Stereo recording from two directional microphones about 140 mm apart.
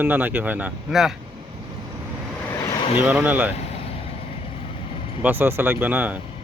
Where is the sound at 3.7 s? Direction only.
45° left (ahead or behind).